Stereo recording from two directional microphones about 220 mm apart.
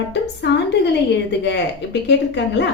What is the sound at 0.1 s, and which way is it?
A woman's voice, 50° left (ahead or behind).